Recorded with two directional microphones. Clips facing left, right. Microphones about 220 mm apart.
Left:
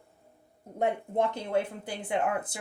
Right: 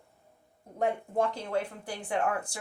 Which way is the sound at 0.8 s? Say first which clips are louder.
Left 1 dB; 20° left (ahead or behind).